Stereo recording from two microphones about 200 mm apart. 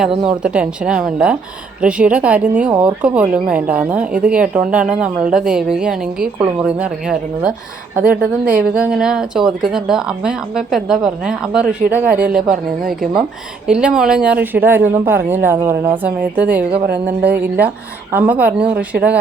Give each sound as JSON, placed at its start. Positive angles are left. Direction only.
{"t": 0.3, "sound": "a woman's voice", "side_deg": -5}
{"t": 16.8, "sound": "a woman's voice", "side_deg": -50}
{"t": 17.3, "sound": "speech", "side_deg": -10}